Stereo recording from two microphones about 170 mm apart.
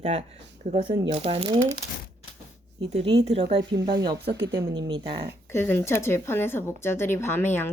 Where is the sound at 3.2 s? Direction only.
40° right (ahead or behind).